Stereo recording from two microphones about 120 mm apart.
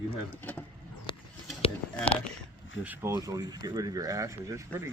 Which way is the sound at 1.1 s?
40° left (ahead or behind).